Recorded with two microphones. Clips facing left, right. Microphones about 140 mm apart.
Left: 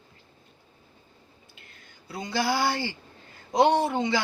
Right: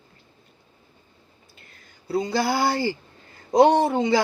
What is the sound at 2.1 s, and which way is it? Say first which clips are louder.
Speech: right 5 dB; 35° right (ahead or behind).